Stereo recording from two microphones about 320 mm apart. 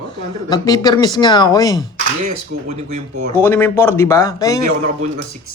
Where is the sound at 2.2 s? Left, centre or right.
Right.